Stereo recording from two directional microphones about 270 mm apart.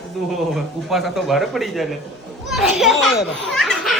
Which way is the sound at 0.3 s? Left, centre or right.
Centre.